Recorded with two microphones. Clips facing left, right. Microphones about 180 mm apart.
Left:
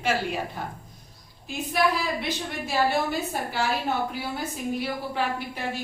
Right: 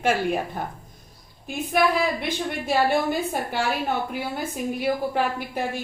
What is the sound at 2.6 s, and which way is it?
A woman's voice, 55° right (ahead or behind).